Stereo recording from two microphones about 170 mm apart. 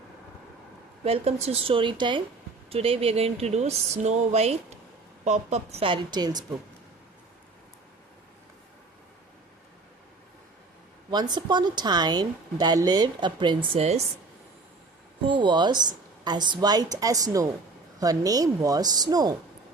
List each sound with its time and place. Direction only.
1.0 s speech: 35° right (ahead or behind)
11.1 s a woman's voice: 25° right (ahead or behind)
15.3 s a woman's voice: 30° right (ahead or behind)